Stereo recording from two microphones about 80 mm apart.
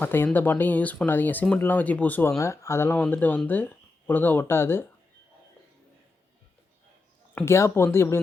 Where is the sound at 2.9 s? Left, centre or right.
Left.